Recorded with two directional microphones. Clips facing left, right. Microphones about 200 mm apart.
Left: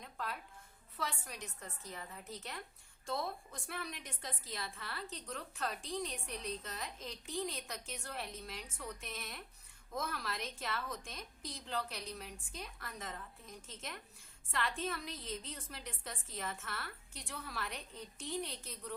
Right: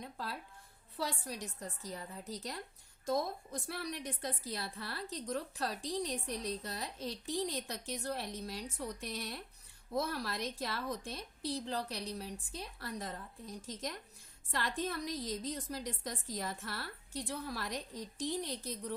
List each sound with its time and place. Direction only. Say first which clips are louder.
0.0 s music: right 1 dB; 35° right (ahead or behind)
0.9 s a woman's voice: right 4 dB; 35° right (ahead or behind)